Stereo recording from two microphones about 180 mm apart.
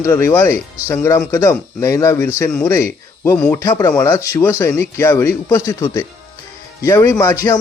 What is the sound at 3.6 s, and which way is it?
Speech, 15° left (ahead or behind).